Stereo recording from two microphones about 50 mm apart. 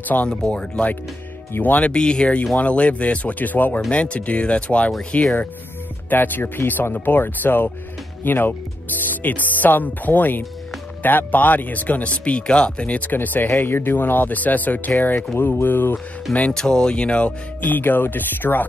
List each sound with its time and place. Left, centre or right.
0.4 s speech: left
1.6 s speech: left
1.9 s speech: centre; by 3.8 s left
3.9 s speech: left
15.3 s music: left
16.5 s speech: centre
17.6 s speech: left